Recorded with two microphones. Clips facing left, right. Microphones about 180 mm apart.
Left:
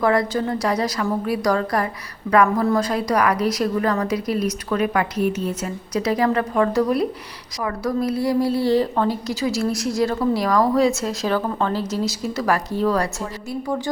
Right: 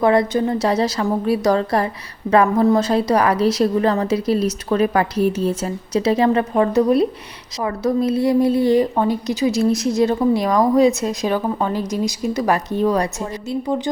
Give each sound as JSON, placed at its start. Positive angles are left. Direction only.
{"t": 0.0, "sound": "a woman's voice", "side_deg": -25}